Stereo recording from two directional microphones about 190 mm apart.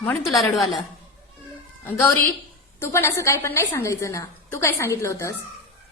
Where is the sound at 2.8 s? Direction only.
15° left (ahead or behind).